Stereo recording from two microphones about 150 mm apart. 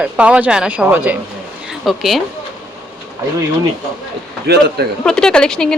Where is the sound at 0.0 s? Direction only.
10° right (ahead or behind).